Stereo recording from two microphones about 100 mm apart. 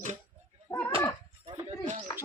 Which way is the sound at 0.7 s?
30° left (ahead or behind).